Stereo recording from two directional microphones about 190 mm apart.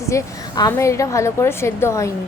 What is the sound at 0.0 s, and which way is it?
A woman's voice, 15° left (ahead or behind).